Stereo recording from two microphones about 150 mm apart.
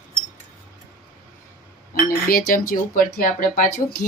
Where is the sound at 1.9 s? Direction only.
75° left (ahead or behind).